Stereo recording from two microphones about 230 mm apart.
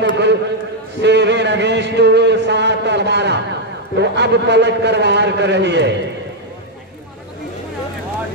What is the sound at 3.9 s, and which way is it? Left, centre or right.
A man's voice, right.